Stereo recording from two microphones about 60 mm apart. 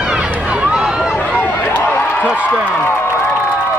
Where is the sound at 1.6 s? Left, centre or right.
Left.